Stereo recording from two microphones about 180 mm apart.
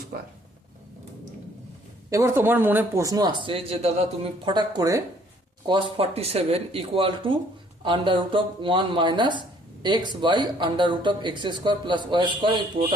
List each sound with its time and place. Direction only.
0.1 s speech: 55° right (ahead or behind)
2.0 s a man's voice: 15° right (ahead or behind)